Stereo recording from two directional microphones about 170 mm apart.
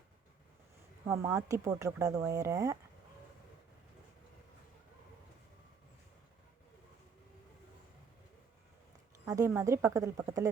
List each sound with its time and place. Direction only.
1.0 s speech: 15° right (ahead or behind)
9.2 s speech: 20° right (ahead or behind)